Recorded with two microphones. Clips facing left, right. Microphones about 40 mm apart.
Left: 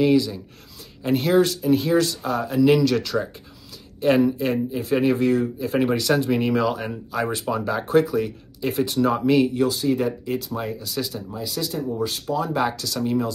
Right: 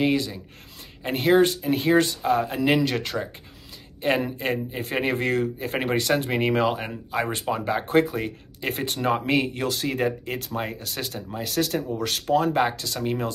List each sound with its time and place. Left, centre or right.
0.0 s speech: right
5.8 s speech: right
9.7 s speech: right
12.5 s speech: right